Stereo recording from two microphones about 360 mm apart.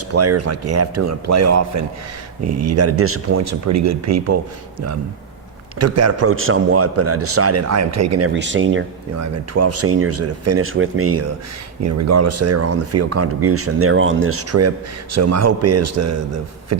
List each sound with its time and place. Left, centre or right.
0.1 s speech: right
5.8 s speech: right
8.3 s speech: right